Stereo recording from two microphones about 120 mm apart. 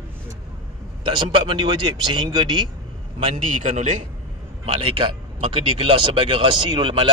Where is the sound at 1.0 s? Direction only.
45° right (ahead or behind).